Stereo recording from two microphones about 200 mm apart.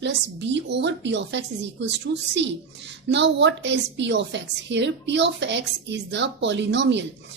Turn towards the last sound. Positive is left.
turn(degrees=-60)  # may be behind; listen again after turning